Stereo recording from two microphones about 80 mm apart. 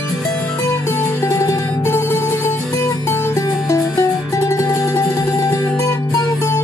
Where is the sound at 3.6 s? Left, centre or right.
Left.